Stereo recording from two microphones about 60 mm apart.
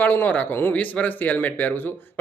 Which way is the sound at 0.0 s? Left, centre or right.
Left.